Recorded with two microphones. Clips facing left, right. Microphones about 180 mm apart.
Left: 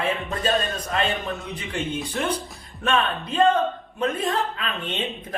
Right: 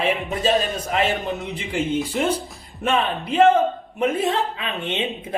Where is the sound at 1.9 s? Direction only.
Centre (ahead or behind).